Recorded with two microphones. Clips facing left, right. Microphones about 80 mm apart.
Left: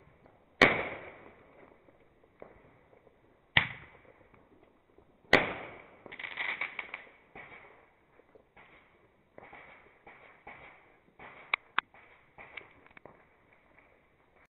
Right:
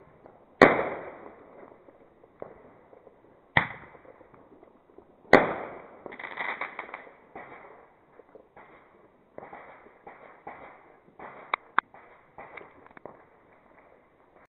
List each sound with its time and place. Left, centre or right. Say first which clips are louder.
0.6 s firecracker: right 8 dB; right
1.3 s fireworks: right 8 dB; right
3.6 s arrow: right 5 dB; right
4.0 s fireworks: right 8 dB; right
5.3 s firecracker: right 8 dB; right
9.4 s fireworks: right 8 dB; right
10.0 s a sound: right 8 dB; right
12.8 s fireworks: right 8 dB; right